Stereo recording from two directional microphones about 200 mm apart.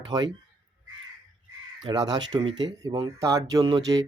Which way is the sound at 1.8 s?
20° right (ahead or behind).